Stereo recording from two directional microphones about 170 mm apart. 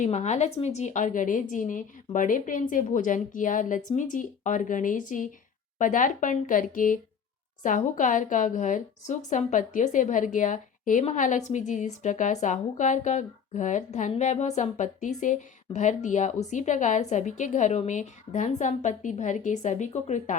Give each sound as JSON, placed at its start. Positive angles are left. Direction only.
{"t": 0.0, "sound": "a woman's voice", "side_deg": 45}